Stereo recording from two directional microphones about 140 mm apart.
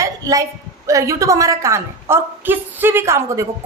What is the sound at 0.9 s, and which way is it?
A woman's voice, 20° right (ahead or behind).